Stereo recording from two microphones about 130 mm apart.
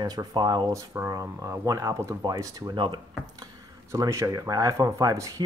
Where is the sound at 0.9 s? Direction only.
20° right (ahead or behind).